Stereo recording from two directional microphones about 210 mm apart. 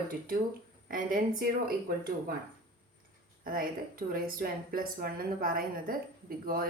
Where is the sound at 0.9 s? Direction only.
40° right (ahead or behind).